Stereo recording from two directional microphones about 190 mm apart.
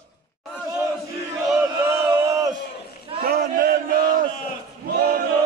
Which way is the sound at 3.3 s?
50° right (ahead or behind).